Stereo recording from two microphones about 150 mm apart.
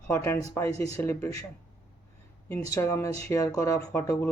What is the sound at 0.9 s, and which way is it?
Speech, 20° left (ahead or behind).